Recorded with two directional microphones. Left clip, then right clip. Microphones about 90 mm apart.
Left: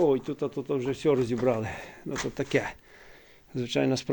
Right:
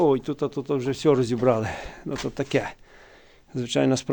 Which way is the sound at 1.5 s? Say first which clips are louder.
Right 5 dB; 50° right (ahead or behind).